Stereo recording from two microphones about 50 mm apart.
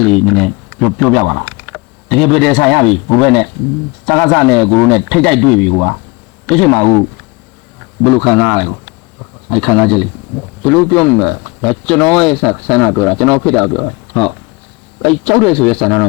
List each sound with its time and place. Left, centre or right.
0.0 s speech: centre
8.0 s speech: centre